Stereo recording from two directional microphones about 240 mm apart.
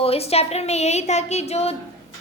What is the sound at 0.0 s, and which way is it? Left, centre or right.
A woman's voice, left.